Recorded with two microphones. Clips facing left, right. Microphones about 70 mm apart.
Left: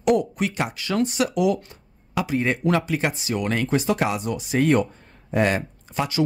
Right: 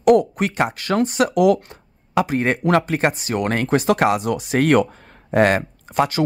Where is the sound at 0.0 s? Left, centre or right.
Right.